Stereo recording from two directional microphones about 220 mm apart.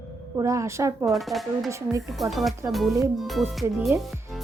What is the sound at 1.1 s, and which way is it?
Speech, centre (ahead or behind).